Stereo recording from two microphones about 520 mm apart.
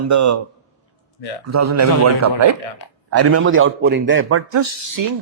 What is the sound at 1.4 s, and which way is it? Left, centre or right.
A man's voice, right.